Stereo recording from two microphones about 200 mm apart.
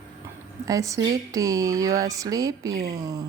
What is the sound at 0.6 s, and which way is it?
Speech, 15° right (ahead or behind).